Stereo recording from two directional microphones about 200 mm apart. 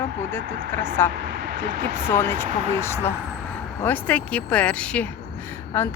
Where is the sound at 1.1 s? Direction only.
55° right (ahead or behind).